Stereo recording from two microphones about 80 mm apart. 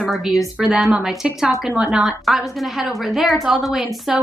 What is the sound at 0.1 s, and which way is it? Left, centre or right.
A woman's voice, centre.